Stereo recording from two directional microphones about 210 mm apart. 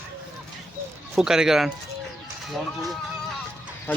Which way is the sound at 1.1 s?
5° right (ahead or behind).